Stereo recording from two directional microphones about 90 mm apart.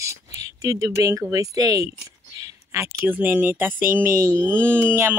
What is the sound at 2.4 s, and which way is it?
Speech, 30° right (ahead or behind).